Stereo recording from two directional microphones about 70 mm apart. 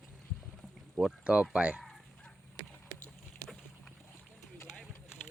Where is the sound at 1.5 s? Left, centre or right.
Centre.